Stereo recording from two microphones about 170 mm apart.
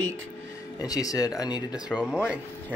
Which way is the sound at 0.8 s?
20° left (ahead or behind).